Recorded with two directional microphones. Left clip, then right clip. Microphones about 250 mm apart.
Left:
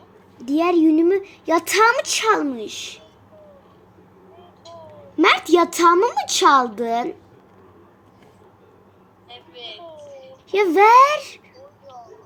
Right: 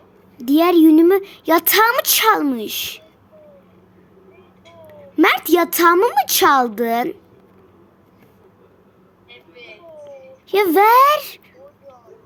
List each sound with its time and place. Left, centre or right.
0.4 s speech: right
5.1 s a woman's voice: right
10.5 s a woman's voice: right